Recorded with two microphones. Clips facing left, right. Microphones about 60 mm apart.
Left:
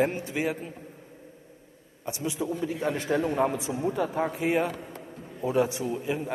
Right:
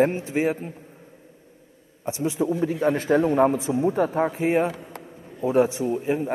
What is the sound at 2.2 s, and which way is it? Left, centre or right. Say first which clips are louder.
A man's voice: right 7 dB; right.